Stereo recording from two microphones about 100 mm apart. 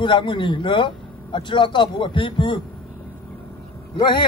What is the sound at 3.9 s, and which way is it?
Speech, 50° left (ahead or behind).